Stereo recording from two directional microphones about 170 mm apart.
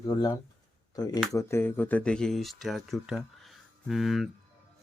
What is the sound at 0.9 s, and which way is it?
Speech, 25° left (ahead or behind).